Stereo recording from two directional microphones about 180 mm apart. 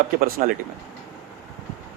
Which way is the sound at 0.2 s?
50° right (ahead or behind).